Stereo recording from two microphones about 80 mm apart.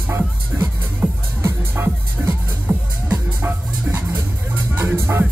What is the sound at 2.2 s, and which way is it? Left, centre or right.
Music, right.